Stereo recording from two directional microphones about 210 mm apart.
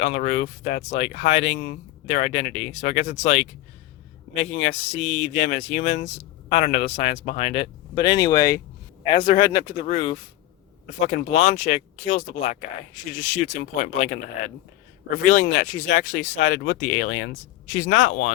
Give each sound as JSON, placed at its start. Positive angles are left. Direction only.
{"t": 0.0, "sound": "speech", "side_deg": 50}
{"t": 0.9, "sound": "speech", "side_deg": 35}
{"t": 4.6, "sound": "speech", "side_deg": 30}